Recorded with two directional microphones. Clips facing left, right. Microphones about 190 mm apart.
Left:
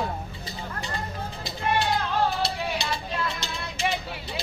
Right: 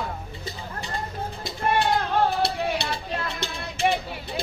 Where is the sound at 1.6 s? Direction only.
55° right (ahead or behind).